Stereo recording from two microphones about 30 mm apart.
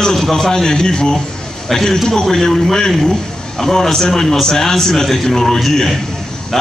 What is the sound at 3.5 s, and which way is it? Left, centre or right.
A man's voice, centre.